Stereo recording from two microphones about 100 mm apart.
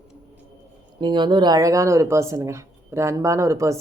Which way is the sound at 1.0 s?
50° right (ahead or behind).